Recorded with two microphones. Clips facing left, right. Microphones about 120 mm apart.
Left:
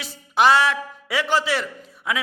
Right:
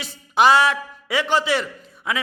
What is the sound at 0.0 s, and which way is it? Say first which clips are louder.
A man's voice: right 1 dB; centre (ahead or behind).